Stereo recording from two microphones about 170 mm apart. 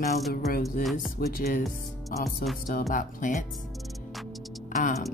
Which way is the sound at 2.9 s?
55° left (ahead or behind).